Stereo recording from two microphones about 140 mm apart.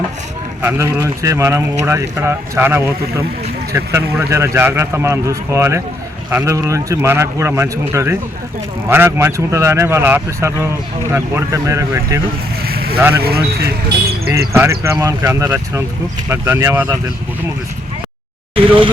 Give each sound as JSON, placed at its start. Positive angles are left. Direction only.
{"t": 0.6, "sound": "a man's voice", "side_deg": -15}
{"t": 12.6, "sound": "vehicle", "side_deg": -90}
{"t": 13.0, "sound": "speech", "side_deg": -15}
{"t": 13.2, "sound": "speech", "side_deg": -90}
{"t": 14.3, "sound": "a man's voice", "side_deg": -20}
{"t": 18.5, "sound": "speech", "side_deg": -40}